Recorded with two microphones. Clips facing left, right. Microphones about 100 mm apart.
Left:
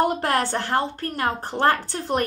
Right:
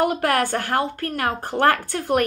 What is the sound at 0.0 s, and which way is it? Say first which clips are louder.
A woman's voice: right 1 dB; 30° left (ahead or behind).